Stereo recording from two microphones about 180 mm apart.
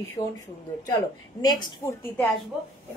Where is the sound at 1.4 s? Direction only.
20° left (ahead or behind).